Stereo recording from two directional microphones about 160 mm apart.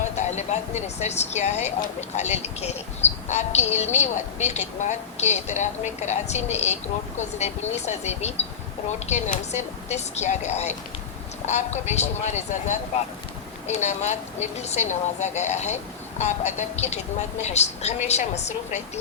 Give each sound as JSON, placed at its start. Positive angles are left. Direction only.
{"t": 0.2, "sound": "a woman's voice", "side_deg": 45}